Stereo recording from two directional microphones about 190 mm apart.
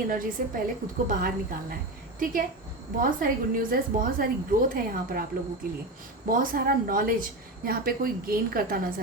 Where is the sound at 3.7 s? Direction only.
50° right (ahead or behind).